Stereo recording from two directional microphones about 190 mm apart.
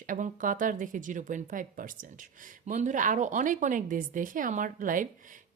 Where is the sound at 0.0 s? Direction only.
45° right (ahead or behind).